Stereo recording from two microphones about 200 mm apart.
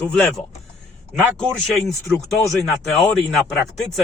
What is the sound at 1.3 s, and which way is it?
Speech, 5° left (ahead or behind).